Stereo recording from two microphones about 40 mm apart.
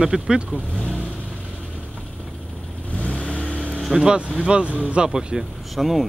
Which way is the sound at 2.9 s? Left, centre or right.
Left.